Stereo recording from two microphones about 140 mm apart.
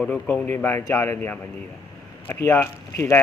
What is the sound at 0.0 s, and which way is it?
A man's voice, 5° left (ahead or behind).